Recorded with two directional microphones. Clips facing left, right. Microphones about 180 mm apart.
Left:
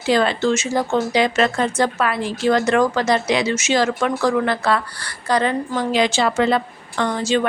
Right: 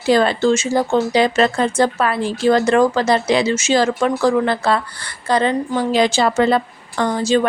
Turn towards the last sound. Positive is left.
turn(degrees=-40)  # may be behind; listen again after turning